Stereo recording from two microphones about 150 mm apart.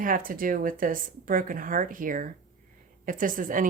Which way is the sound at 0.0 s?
70° right (ahead or behind).